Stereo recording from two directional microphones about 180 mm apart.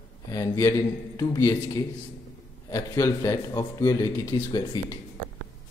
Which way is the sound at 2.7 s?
20° left (ahead or behind).